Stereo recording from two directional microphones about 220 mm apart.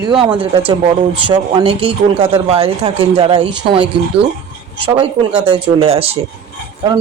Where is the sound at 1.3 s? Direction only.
25° right (ahead or behind).